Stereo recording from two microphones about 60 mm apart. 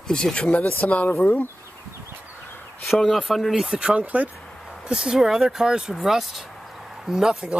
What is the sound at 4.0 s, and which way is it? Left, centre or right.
Speech, right.